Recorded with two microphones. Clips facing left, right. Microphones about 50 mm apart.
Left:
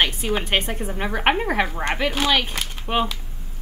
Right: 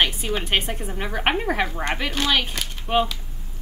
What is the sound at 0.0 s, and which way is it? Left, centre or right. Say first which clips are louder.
A woman's voice: left 1 dB; centre.